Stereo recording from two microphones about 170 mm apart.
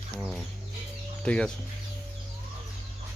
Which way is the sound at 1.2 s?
5° left (ahead or behind).